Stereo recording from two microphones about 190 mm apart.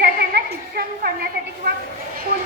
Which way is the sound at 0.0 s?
55° right (ahead or behind).